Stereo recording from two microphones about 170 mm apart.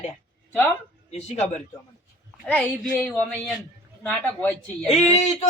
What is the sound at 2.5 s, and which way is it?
A woman's voice, 10° left (ahead or behind).